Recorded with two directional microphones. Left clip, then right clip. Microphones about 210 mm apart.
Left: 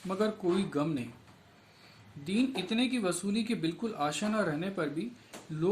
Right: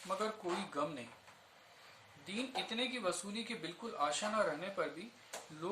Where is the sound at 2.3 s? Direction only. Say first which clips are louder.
Left 8 dB; 50° left (ahead or behind).